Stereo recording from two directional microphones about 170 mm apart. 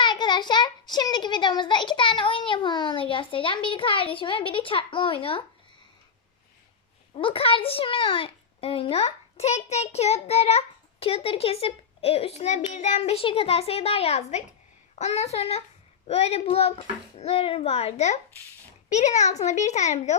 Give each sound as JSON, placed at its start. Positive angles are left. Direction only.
{"t": 0.0, "sound": "a child's voice", "side_deg": 25}
{"t": 7.1, "sound": "a child's voice", "side_deg": 30}